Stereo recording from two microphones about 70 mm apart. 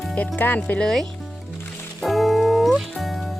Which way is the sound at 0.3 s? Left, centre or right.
Left.